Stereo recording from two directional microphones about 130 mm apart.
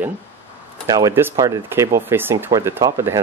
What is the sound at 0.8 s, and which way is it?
Speech, 25° right (ahead or behind).